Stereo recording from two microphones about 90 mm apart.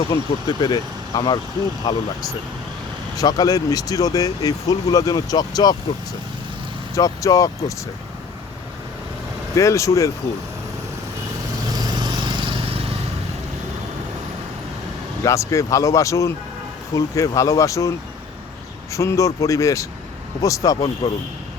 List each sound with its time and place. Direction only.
0.4 s speech: 50° left (ahead or behind)
6.9 s speech: 40° left (ahead or behind)
9.6 s speech: 35° left (ahead or behind)
11.7 s vehicle: 50° right (ahead or behind); by 12.9 s 90° right
15.2 s speech: 35° left (ahead or behind)